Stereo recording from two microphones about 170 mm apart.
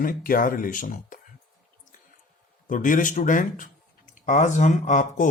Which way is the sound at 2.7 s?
50° left (ahead or behind).